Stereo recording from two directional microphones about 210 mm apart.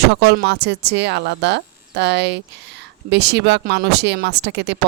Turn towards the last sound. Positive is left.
turn(degrees=-55)  # may be behind; listen again after turning